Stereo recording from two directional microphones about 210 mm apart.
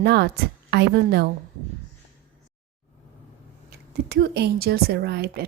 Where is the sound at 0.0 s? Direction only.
50° right (ahead or behind).